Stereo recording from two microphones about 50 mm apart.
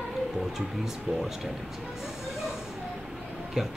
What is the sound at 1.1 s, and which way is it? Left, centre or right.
Speech, centre.